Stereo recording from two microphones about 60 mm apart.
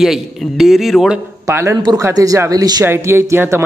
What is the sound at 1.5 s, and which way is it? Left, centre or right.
Speech, right.